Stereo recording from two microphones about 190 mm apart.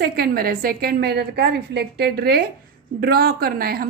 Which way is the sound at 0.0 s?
50° right (ahead or behind).